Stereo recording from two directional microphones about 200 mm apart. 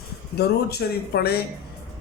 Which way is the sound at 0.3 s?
55° left (ahead or behind).